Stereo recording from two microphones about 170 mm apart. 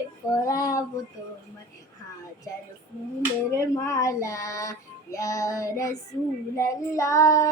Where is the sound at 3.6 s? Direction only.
20° left (ahead or behind).